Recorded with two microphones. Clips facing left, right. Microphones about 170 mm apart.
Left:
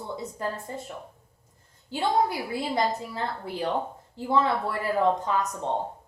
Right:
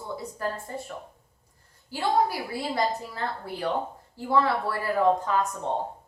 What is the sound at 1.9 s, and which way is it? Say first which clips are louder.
Speech: even; 20° left (ahead or behind).